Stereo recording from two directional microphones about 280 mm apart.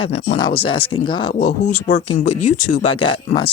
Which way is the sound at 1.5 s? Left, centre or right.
Left.